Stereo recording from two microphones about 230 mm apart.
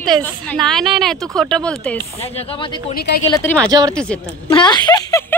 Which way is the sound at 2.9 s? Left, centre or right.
Left.